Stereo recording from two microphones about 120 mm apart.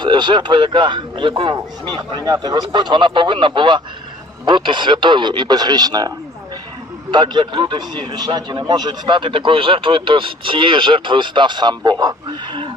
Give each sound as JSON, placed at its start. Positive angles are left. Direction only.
{"t": 0.0, "sound": "speech", "side_deg": -40}